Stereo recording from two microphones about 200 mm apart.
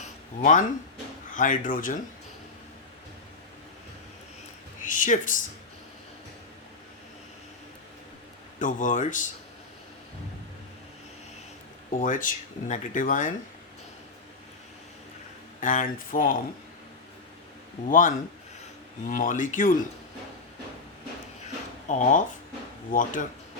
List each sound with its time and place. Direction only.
0.0 s a sound: 40° left (ahead or behind)
1.3 s speech: 40° left (ahead or behind)
4.8 s speech: 40° left (ahead or behind)
8.5 s speech: 40° left (ahead or behind)
11.9 s speech: 40° left (ahead or behind)
15.6 s speech: 40° left (ahead or behind)
17.8 s speech: 40° left (ahead or behind)
21.8 s speech: 40° left (ahead or behind)